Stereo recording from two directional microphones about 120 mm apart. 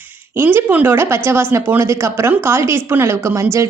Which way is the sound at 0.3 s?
15° right (ahead or behind).